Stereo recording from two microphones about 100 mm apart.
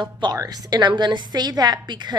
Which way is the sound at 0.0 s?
50° right (ahead or behind).